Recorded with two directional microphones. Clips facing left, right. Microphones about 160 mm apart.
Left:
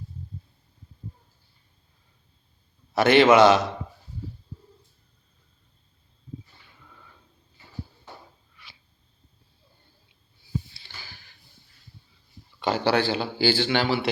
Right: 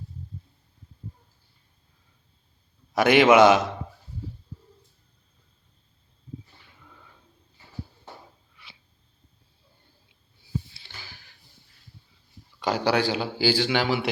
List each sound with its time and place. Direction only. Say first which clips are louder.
2.9 s a man's voice: even; 15° right (ahead or behind)
12.6 s a man's voice: left 1 dB; 5° right (ahead or behind)